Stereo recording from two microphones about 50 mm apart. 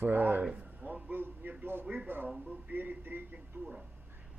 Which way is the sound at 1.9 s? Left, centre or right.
Right.